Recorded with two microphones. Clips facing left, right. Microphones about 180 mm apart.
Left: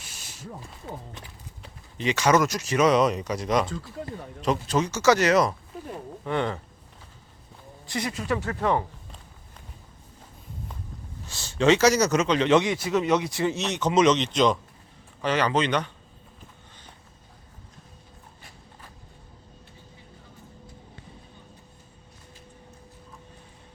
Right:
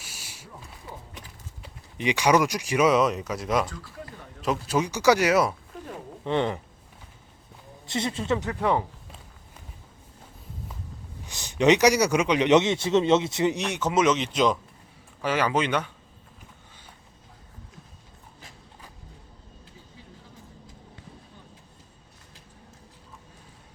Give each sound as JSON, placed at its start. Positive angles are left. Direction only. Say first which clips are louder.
{"t": 0.0, "sound": "a sound", "louder": "even", "side_deg": -10}
{"t": 2.0, "sound": "speech", "louder": "even", "side_deg": -15}
{"t": 6.2, "sound": "speech", "louder": "right 2 dB", "side_deg": -20}
{"t": 7.9, "sound": "speech", "louder": "right 2 dB", "side_deg": -25}
{"t": 11.3, "sound": "speech", "louder": "right 1 dB", "side_deg": -15}